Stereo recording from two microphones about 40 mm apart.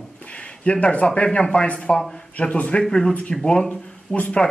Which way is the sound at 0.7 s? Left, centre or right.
Left.